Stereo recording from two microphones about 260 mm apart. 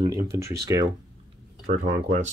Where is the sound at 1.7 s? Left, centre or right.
Right.